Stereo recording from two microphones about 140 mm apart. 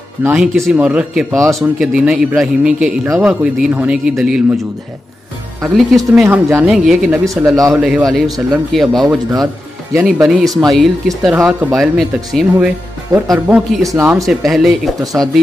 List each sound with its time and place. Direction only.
0.4 s speech: centre (ahead or behind)
5.6 s speech: centre (ahead or behind)
6.2 s speech: 20° right (ahead or behind)
6.6 s speech: centre (ahead or behind)
7.2 s speech: 25° right (ahead or behind)
7.7 s speech: centre (ahead or behind)
13.1 s speech: 25° right (ahead or behind)
14.2 s speech: centre (ahead or behind)